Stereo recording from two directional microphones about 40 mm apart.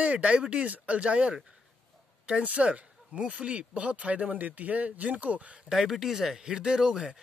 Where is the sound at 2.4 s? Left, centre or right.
Right.